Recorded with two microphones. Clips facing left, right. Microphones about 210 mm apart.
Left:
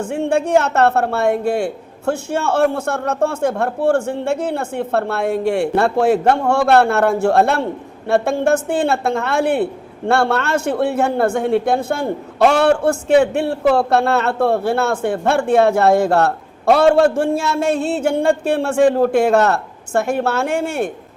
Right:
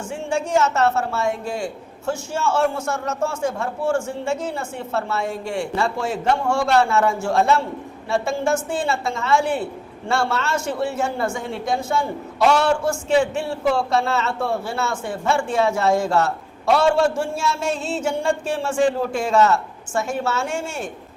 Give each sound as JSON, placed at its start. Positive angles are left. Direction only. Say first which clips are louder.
{"t": 0.0, "sound": "a man's voice", "louder": "left 7 dB", "side_deg": 60}